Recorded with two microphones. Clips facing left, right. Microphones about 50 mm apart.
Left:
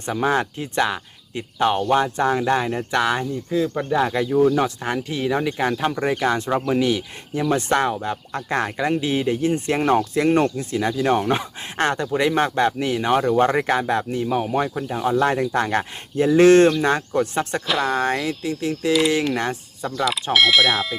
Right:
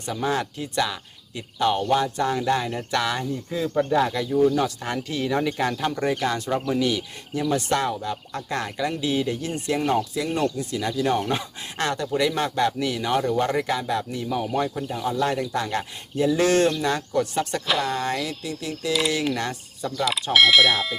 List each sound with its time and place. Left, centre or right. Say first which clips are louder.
0.0 s speech: left 4 dB; left
3.8 s speech: right 4 dB; centre
4.1 s speech: left 3 dB; left
9.6 s speech: left 1 dB; left
17.7 s speech: left 3 dB; centre
17.9 s speech: left 5 dB; left
18.2 s speech: left 5 dB; centre
18.8 s speech: left 5 dB; left
19.8 s speech: left 2 dB; centre